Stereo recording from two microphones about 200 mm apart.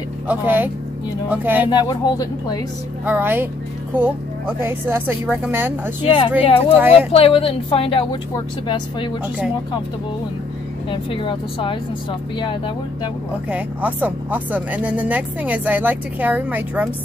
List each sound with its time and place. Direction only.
0.3 s speech: 10° right (ahead or behind)
1.7 s a woman's voice: 20° left (ahead or behind)
3.1 s speech: 10° right (ahead or behind)
6.0 s a woman's voice: 25° left (ahead or behind)
10.9 s a woman's voice: 25° left (ahead or behind)
13.5 s speech: 10° right (ahead or behind)